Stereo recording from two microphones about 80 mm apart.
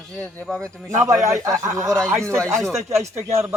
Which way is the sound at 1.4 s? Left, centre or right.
Right.